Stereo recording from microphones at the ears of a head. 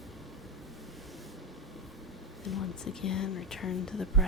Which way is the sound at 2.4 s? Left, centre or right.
Left.